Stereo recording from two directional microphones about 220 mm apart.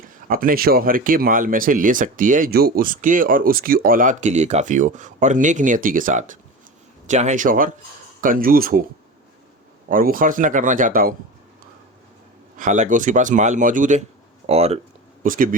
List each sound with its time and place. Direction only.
0.0 s speech: 40° right (ahead or behind)
9.9 s speech: 40° right (ahead or behind)
12.5 s speech: 35° right (ahead or behind)